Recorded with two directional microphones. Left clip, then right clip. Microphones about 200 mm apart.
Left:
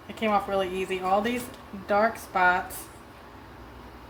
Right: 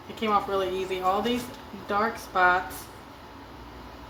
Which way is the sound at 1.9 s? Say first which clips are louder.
Left 3 dB; 35° left (ahead or behind).